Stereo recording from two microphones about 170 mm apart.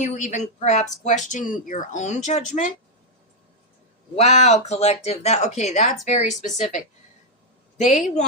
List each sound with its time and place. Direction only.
0.0 s speech: 45° left (ahead or behind)
4.1 s speech: 40° left (ahead or behind)